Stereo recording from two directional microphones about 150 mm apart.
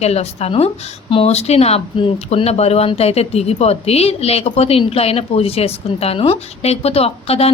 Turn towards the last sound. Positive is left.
turn(degrees=40)  # may be behind; listen again after turning